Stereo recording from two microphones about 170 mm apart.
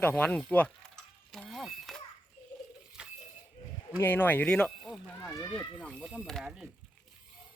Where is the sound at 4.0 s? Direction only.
10° left (ahead or behind).